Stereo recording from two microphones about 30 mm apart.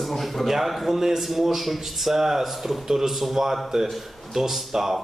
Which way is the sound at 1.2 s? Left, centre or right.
Centre.